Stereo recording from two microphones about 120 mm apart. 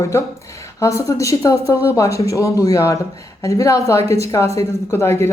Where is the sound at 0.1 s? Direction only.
20° left (ahead or behind).